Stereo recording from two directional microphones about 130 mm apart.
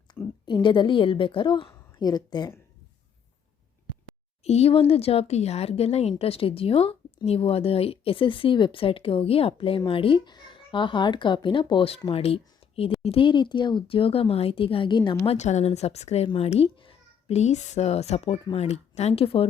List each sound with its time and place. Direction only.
0.1 s a woman's voice: 35° left (ahead or behind)
4.4 s speech: 55° left (ahead or behind); by 15.3 s 35° left (ahead or behind)
15.3 s speech: 60° left (ahead or behind); by 17.3 s 45° left (ahead or behind)
17.3 s speech: 60° left (ahead or behind)